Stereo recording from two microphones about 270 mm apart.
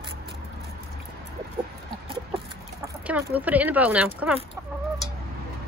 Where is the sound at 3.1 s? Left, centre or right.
Centre.